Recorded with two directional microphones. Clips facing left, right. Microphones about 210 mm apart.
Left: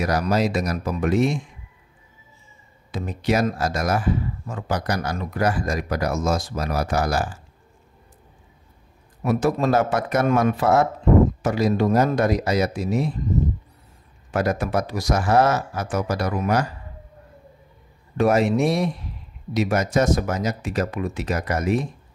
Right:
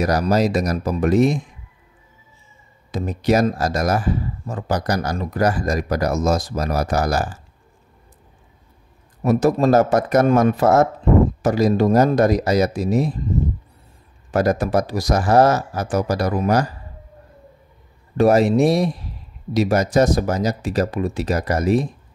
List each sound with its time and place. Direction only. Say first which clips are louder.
0.0 s speech: right 3 dB; 40° right (ahead or behind)
2.9 s speech: right 4 dB; 40° right (ahead or behind)
9.2 s speech: right 4 dB; 40° right (ahead or behind)
14.3 s speech: right 4 dB; 40° right (ahead or behind)
18.1 s speech: right 4 dB; 35° right (ahead or behind)